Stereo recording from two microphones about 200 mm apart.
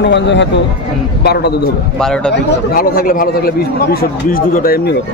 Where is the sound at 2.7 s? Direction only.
45° left (ahead or behind).